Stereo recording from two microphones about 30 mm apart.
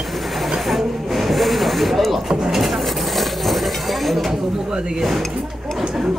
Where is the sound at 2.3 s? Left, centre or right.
Centre.